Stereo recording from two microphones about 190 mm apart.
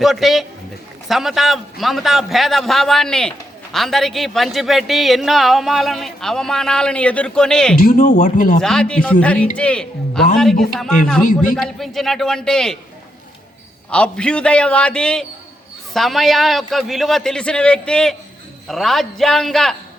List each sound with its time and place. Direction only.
0.0 s a man's voice: centre (ahead or behind)
7.8 s speech: 45° left (ahead or behind)
8.6 s a man's voice: 5° left (ahead or behind)
13.9 s a man's voice: 5° left (ahead or behind)